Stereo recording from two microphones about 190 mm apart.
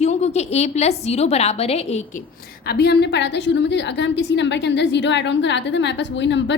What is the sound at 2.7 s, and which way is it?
A woman's voice, 60° left (ahead or behind).